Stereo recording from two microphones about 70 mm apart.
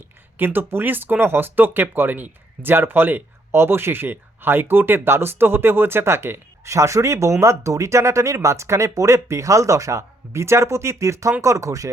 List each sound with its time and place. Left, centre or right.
0.3 s speech: right